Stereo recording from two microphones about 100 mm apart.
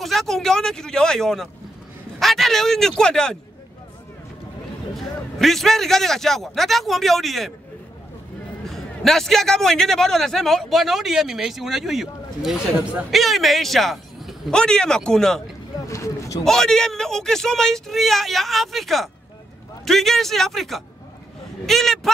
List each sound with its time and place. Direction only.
0.0 s a man's voice: centre (ahead or behind)
4.9 s a man's voice: centre (ahead or behind)
8.6 s a man's voice: 5° left (ahead or behind)
15.9 s a sound: 30° left (ahead or behind)
16.4 s a man's voice: 5° left (ahead or behind)